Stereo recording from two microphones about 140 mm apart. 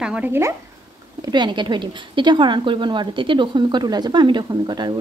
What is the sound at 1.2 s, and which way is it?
Speech, 35° right (ahead or behind).